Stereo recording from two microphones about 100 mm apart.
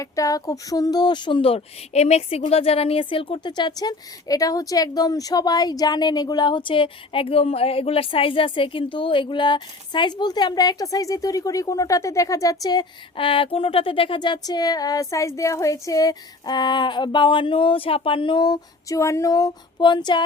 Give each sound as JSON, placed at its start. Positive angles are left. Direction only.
{"t": 0.0, "sound": "speech", "side_deg": 35}
{"t": 1.4, "sound": "speech", "side_deg": 80}
{"t": 13.1, "sound": "speech", "side_deg": 60}
{"t": 19.8, "sound": "speech", "side_deg": 50}